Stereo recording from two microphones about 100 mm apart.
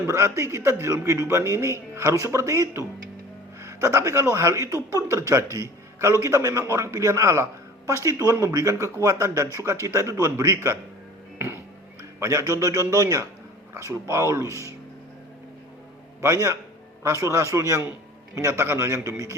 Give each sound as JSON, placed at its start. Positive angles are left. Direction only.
{"t": 0.1, "sound": "a man's voice", "side_deg": -30}
{"t": 11.3, "sound": "music", "side_deg": -25}
{"t": 12.2, "sound": "a man's voice", "side_deg": -30}
{"t": 16.2, "sound": "a man's voice", "side_deg": -30}